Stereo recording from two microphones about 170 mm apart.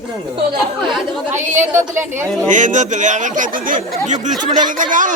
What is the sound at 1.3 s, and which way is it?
Speech, 45° right (ahead or behind).